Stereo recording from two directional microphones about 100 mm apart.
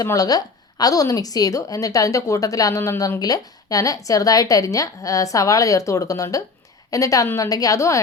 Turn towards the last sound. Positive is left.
turn(degrees=30)  # may be behind; listen again after turning